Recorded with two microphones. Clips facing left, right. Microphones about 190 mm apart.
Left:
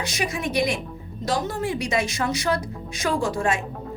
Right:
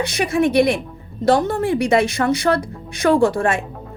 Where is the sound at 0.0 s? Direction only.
60° right (ahead or behind).